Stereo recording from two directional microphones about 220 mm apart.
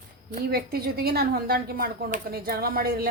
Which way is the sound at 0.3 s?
45° right (ahead or behind).